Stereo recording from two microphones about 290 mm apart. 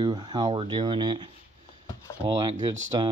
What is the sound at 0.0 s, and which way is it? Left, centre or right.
Speech, centre.